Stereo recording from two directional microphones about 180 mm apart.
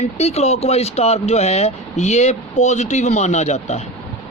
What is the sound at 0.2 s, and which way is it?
A woman's voice, 35° left (ahead or behind).